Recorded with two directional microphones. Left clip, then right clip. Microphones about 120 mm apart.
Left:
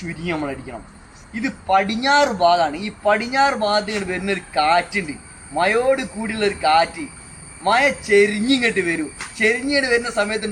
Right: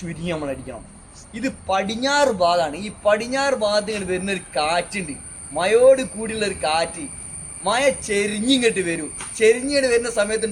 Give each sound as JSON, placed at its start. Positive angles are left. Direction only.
{"t": 0.1, "sound": "speech", "side_deg": -55}